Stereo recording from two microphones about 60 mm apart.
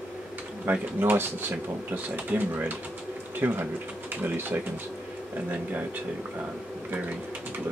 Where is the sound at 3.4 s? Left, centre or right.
Right.